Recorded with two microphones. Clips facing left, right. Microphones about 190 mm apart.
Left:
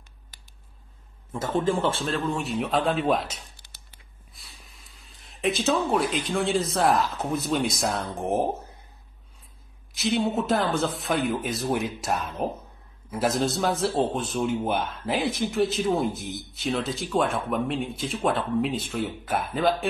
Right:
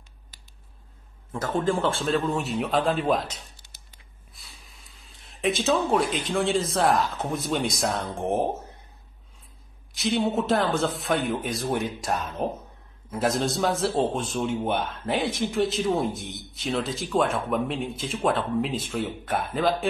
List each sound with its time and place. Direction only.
1.3 s a man's voice: centre (ahead or behind)
4.3 s a sound: centre (ahead or behind)
5.0 s a man's voice: centre (ahead or behind)
9.9 s a man's voice: centre (ahead or behind)